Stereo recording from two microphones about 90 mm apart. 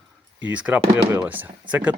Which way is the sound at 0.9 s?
30° right (ahead or behind).